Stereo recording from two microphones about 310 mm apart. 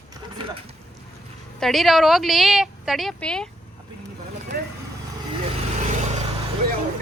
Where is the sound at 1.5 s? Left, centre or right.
Centre.